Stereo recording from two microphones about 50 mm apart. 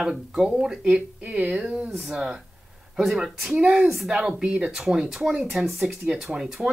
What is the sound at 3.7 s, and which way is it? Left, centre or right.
Speech, centre.